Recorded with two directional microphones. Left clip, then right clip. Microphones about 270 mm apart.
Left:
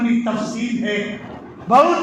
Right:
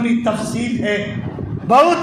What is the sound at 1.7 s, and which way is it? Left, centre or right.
Roar, right.